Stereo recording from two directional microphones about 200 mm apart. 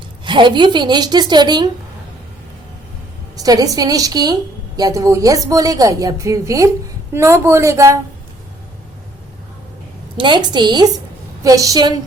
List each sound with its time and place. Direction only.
0.3 s a woman's voice: 25° right (ahead or behind)
3.3 s a woman's voice: 20° right (ahead or behind)
10.2 s a woman's voice: 25° right (ahead or behind)